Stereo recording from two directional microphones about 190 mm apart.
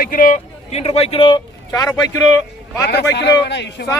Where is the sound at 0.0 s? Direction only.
45° left (ahead or behind); by 2.2 s 15° left (ahead or behind).